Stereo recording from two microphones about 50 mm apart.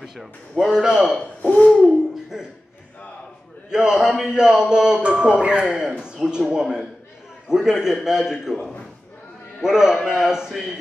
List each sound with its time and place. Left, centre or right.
0.0 s speech: centre
1.4 s a sound: left
2.3 s speech: centre
3.7 s speech: centre
9.6 s speech: centre